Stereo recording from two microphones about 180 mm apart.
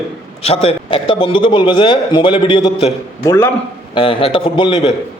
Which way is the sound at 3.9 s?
30° left (ahead or behind).